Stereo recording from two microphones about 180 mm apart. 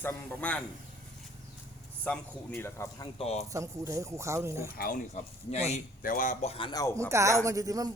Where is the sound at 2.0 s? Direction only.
5° left (ahead or behind).